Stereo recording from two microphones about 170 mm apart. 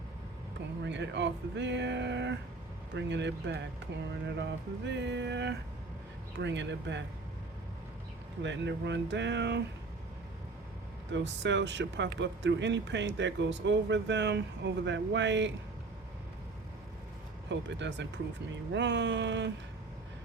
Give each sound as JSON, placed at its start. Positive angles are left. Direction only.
{"t": 0.9, "sound": "speech", "side_deg": -90}
{"t": 8.4, "sound": "speech", "side_deg": -90}
{"t": 11.1, "sound": "speech", "side_deg": -90}
{"t": 17.5, "sound": "speech", "side_deg": -90}